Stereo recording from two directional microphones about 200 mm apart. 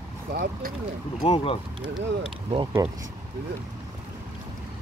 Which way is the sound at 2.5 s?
25° right (ahead or behind).